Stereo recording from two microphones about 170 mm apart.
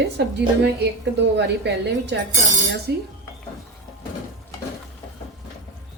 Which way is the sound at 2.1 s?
90° right.